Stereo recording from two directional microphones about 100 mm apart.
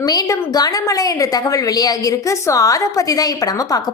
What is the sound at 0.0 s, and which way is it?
A woman's voice, 40° left (ahead or behind).